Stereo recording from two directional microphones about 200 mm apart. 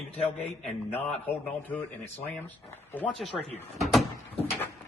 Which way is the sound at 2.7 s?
10° left (ahead or behind).